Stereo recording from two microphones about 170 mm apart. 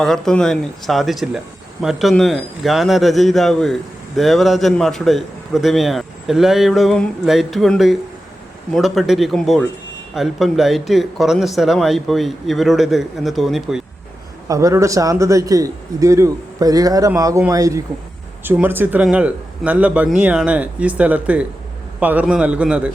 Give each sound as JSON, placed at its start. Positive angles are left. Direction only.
{"t": 0.0, "sound": "a man's voice", "side_deg": 5}
{"t": 14.4, "sound": "a man's voice", "side_deg": -20}